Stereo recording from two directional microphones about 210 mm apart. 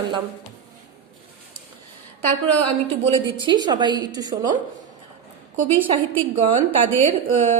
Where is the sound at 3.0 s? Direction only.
25° right (ahead or behind).